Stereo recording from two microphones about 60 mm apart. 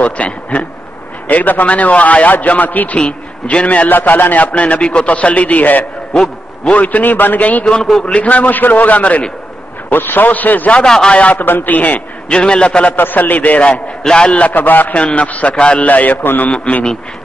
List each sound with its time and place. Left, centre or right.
0.0 s a man's voice: left
6.1 s a sound: centre
6.7 s a man's voice: left
7.6 s a man's voice: centre
8.1 s a man's voice: left
10.8 s a man's voice: centre
11.1 s a man's voice: left
12.3 s a man's voice: centre
12.9 s a man's voice: left
16.5 s a man's voice: centre